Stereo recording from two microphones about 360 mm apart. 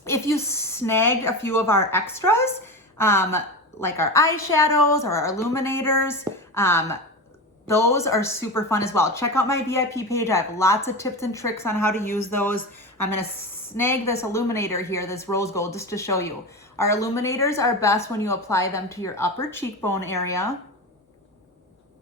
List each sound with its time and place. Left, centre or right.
0.0 s a woman's voice: centre
4.4 s a woman's voice: left
4.9 s a woman's voice: centre
13.7 s a woman's voice: centre